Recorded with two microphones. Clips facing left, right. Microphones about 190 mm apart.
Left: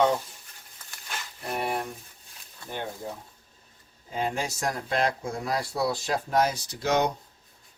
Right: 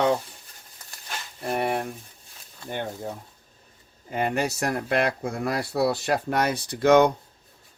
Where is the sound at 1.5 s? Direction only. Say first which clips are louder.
Right 4 dB; 60° right (ahead or behind).